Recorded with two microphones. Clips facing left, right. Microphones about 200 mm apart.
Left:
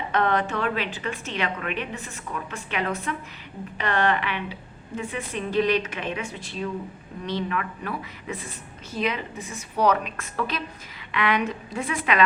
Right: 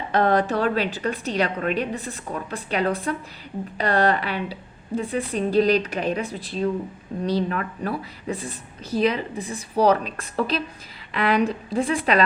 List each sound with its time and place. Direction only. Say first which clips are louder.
0.1 s a woman's voice: right 4 dB; 35° right (ahead or behind)